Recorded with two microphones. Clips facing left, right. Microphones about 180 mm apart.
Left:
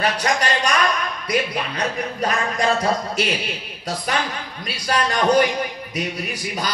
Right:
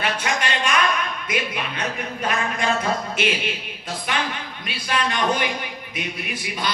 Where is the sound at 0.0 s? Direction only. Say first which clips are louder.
Left 4 dB; 40° left (ahead or behind).